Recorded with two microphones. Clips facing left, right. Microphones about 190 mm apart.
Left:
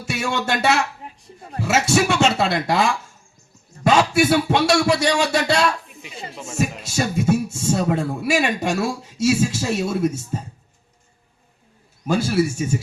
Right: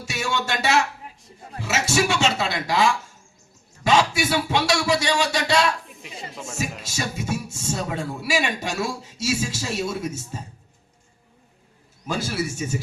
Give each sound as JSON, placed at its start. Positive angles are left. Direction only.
{"t": 0.0, "sound": "a man's voice", "side_deg": 55}
{"t": 6.9, "sound": "a man's voice", "side_deg": 55}
{"t": 12.0, "sound": "a man's voice", "side_deg": 50}